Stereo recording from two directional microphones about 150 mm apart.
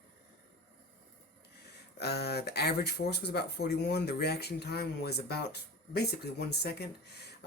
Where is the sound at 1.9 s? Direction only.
90° left.